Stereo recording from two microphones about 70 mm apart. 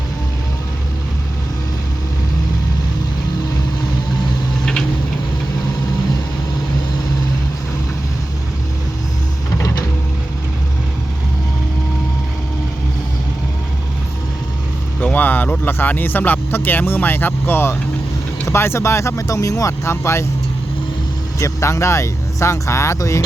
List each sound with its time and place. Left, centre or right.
4.6 s tick-tock: centre
15.0 s speech: left
21.3 s speech: left